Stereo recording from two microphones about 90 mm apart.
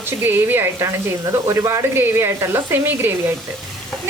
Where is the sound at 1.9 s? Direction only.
25° right (ahead or behind).